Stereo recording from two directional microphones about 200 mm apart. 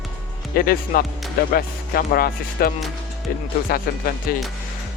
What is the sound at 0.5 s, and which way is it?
Speech, 45° left (ahead or behind).